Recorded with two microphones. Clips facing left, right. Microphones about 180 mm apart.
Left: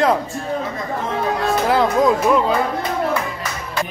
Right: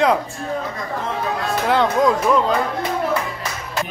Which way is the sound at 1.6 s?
5° left (ahead or behind).